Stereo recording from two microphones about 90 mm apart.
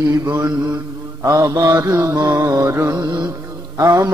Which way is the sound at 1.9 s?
30° right (ahead or behind).